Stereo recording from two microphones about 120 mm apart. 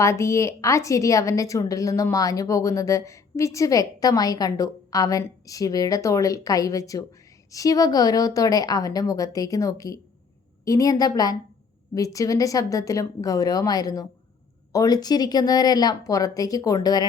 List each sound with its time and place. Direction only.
0.0 s a woman's voice: 25° left (ahead or behind)